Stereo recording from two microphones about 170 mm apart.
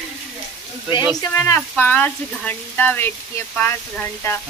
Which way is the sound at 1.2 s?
20° left (ahead or behind).